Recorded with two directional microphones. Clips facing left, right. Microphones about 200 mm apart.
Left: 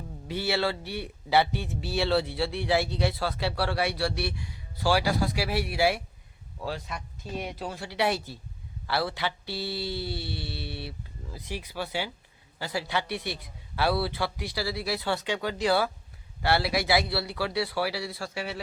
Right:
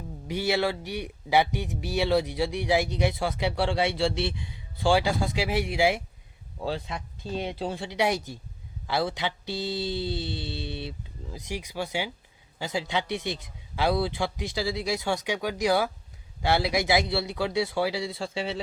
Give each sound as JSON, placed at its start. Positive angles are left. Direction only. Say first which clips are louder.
{"t": 0.3, "sound": "a man's voice", "louder": "right 2 dB", "side_deg": -15}
{"t": 7.9, "sound": "a man's voice", "louder": "even", "side_deg": -15}